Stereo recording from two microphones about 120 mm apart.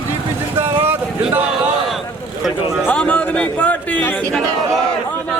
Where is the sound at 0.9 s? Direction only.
15° right (ahead or behind).